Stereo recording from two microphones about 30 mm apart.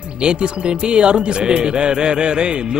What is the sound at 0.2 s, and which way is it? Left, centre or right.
A man's voice, right.